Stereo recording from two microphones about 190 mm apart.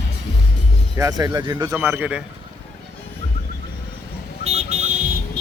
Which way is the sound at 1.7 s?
10° right (ahead or behind).